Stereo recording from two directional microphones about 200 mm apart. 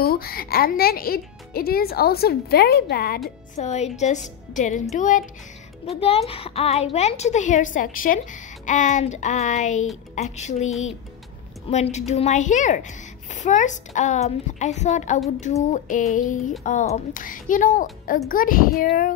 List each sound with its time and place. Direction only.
0.0 s speech: 50° left (ahead or behind)
3.5 s a woman's voice: 35° left (ahead or behind)